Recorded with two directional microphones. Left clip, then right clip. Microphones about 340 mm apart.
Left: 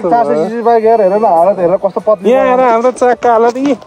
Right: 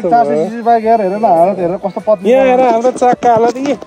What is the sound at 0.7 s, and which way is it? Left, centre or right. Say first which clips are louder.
Speech: left 3 dB; left.